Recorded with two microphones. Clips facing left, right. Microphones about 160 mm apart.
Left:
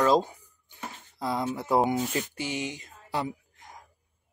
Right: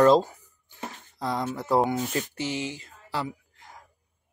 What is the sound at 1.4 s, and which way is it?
Speech, 15° left (ahead or behind).